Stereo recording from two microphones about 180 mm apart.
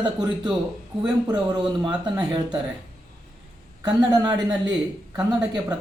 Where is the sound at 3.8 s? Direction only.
20° right (ahead or behind).